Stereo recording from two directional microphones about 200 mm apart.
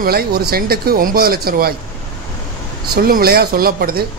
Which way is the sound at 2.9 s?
50° right (ahead or behind).